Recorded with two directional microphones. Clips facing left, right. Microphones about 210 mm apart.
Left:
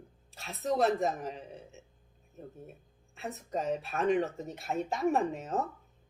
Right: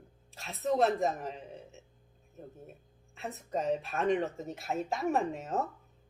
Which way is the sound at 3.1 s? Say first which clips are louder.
Even; centre (ahead or behind).